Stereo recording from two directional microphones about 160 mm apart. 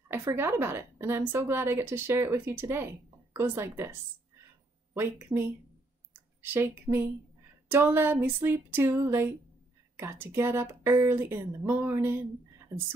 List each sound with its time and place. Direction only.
0.1 s a woman's voice: 15° right (ahead or behind)
4.9 s a woman's voice: 15° right (ahead or behind)